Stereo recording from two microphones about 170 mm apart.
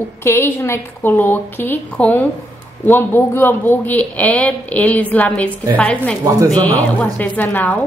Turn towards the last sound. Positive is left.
turn(degrees=10)  # may be behind; listen again after turning